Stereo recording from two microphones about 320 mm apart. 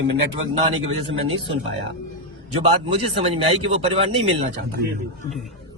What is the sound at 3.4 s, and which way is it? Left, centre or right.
Speech, centre.